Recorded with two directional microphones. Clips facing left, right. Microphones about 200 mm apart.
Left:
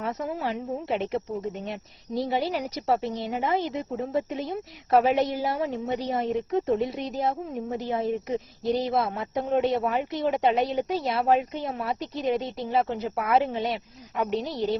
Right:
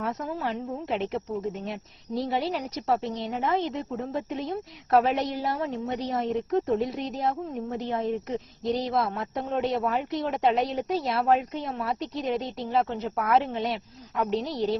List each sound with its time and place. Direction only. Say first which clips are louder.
0.0 s a woman's voice: left 1 dB; centre (ahead or behind)